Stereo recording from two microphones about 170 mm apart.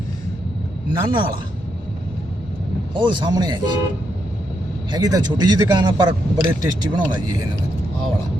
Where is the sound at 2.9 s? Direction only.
30° right (ahead or behind).